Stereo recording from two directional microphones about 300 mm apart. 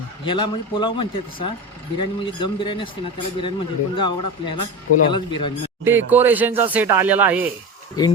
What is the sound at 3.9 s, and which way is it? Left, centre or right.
Speech, centre.